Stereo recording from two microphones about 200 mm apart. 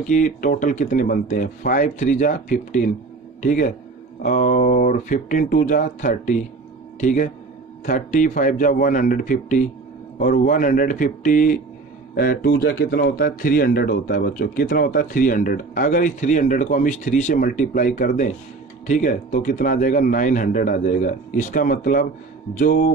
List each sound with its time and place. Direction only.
0.0 s speech: 40° left (ahead or behind)